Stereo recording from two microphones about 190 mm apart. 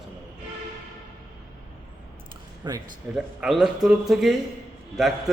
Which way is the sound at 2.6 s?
20° right (ahead or behind).